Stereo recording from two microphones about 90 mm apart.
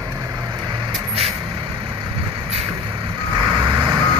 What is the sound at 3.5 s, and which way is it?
Vehicle, 55° right (ahead or behind).